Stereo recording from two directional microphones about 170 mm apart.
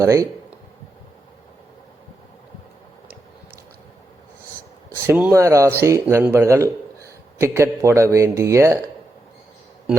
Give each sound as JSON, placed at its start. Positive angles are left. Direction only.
{"t": 0.0, "sound": "speech", "side_deg": -20}
{"t": 5.0, "sound": "a man's voice", "side_deg": -10}